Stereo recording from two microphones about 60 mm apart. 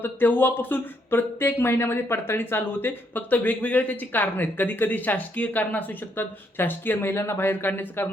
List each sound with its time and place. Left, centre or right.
0.0 s speech: left